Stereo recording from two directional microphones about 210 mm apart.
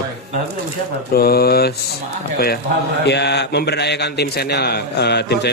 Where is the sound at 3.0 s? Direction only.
55° left (ahead or behind).